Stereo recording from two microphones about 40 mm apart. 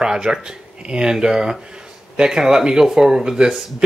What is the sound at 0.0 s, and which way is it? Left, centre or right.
Speech, centre.